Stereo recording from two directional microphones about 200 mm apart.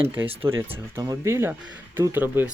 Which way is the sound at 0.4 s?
10° right (ahead or behind).